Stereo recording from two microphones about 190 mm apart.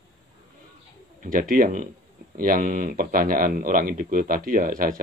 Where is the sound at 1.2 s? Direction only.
45° right (ahead or behind).